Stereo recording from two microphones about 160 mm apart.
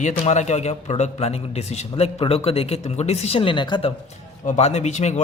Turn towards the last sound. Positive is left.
turn(degrees=45)  # may be behind; listen again after turning